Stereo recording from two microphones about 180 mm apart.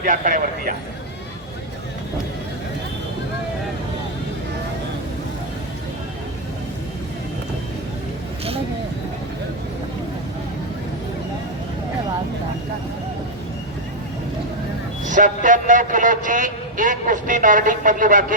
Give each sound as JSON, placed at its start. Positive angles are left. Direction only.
{"t": 0.0, "sound": "a man's voice", "side_deg": -45}
{"t": 15.0, "sound": "a man's voice", "side_deg": -45}